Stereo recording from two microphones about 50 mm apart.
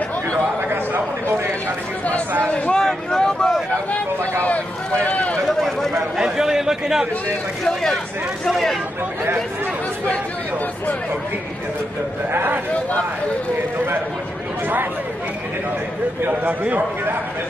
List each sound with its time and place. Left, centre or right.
2.4 s a sound: left
2.7 s vehicle: centre
5.0 s run: left
6.1 s a sound: centre
7.6 s speech: centre
12.3 s speech: right
16.2 s a man's voice: right